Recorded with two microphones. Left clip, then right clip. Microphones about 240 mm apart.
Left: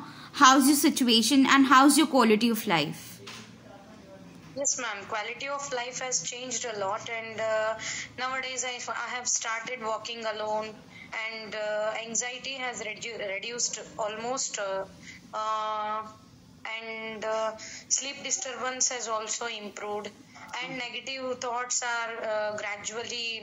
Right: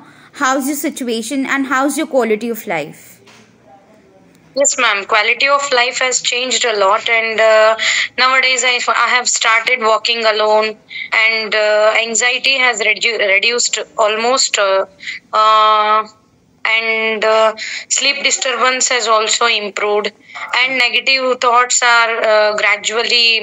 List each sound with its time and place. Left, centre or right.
0.6 s a woman's voice: centre
4.6 s a woman's voice: right